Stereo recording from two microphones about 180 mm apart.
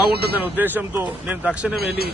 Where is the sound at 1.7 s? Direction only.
60° right (ahead or behind).